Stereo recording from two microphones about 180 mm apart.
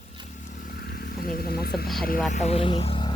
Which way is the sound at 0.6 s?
60° left (ahead or behind).